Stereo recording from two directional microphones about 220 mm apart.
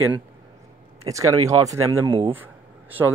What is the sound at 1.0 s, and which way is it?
Speech, 15° right (ahead or behind).